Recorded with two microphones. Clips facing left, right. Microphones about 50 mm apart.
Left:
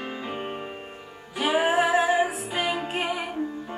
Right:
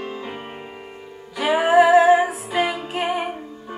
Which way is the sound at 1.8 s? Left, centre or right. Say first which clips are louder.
Right 8 dB; right.